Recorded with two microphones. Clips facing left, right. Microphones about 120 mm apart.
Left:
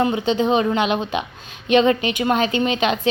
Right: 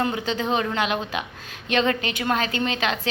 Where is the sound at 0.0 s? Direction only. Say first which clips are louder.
Left 6 dB; 20° left (ahead or behind).